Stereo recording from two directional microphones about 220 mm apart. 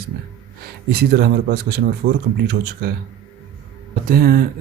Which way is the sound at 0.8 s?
45° right (ahead or behind).